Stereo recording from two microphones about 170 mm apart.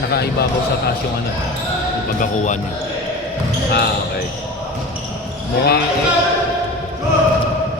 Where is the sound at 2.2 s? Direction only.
45° left (ahead or behind).